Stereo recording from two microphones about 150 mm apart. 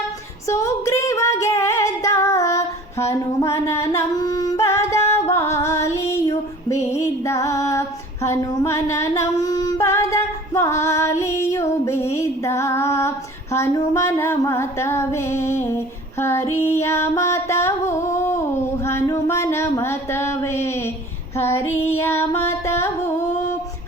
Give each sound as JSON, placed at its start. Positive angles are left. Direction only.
{"t": 0.4, "sound": "female singing", "side_deg": 20}
{"t": 5.3, "sound": "music", "side_deg": 20}
{"t": 6.7, "sound": "female singing", "side_deg": 20}